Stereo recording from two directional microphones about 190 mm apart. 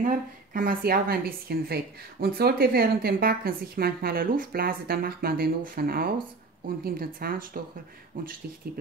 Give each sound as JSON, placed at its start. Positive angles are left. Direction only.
{"t": 0.0, "sound": "a woman's voice", "side_deg": -45}